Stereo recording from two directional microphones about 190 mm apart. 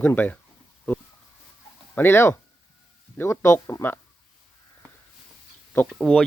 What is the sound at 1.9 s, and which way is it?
Speech, 10° left (ahead or behind).